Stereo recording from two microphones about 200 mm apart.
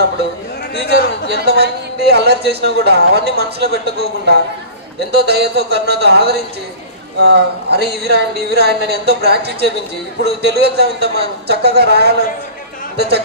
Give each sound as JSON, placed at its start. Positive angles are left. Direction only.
{"t": 0.8, "sound": "a man's voice", "side_deg": -55}